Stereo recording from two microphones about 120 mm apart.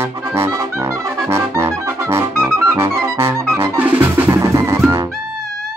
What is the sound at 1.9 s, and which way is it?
Music, 20° right (ahead or behind).